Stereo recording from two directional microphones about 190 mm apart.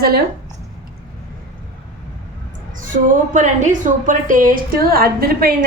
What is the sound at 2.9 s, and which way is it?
A woman's voice, 40° right (ahead or behind).